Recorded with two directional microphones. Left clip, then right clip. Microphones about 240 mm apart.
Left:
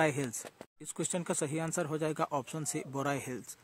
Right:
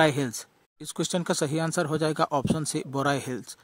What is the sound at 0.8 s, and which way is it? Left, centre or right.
Speech, right.